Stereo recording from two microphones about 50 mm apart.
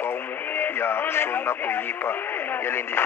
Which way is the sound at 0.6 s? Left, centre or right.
Left.